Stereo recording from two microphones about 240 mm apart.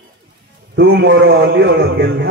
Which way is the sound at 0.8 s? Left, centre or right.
Right.